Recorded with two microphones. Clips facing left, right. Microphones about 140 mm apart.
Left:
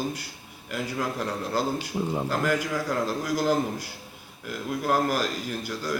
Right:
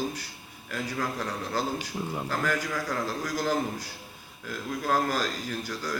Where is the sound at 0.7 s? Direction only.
15° left (ahead or behind).